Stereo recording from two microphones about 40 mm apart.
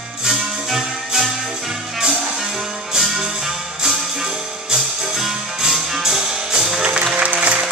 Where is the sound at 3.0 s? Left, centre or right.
Centre; by 7.6 s right.